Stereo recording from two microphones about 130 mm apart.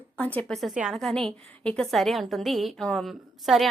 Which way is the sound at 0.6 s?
5° right (ahead or behind).